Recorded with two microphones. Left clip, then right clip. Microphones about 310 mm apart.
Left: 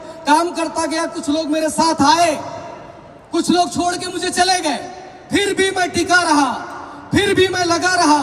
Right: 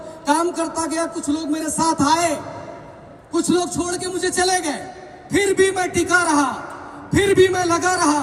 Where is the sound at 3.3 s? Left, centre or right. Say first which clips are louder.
Left 4 dB; left.